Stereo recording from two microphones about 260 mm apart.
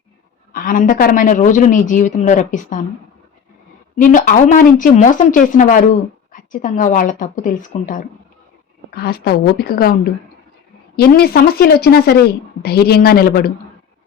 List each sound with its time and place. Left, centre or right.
0.5 s speech: left
3.9 s a woman's voice: left
10.9 s a woman's voice: left